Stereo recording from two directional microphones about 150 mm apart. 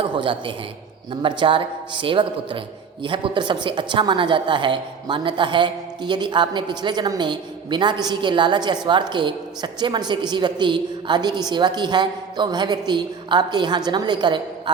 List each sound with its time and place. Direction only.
0.0 s a woman's voice: 35° right (ahead or behind)